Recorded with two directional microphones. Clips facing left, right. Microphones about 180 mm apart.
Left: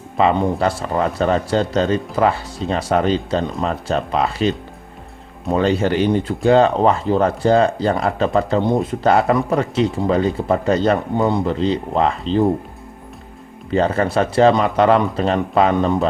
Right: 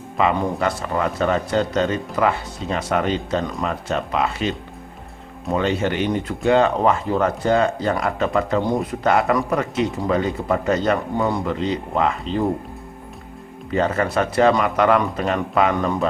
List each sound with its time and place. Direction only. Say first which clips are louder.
0.2 s speech: left 4 dB; 30° left (ahead or behind)
5.5 s speech: left 4 dB; 35° left (ahead or behind)
13.7 s speech: left 3 dB; 30° left (ahead or behind)